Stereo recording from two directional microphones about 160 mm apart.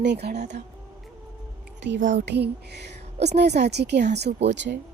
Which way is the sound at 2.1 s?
90° right.